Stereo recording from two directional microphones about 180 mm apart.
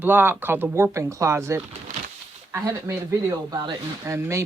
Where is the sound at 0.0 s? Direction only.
10° right (ahead or behind).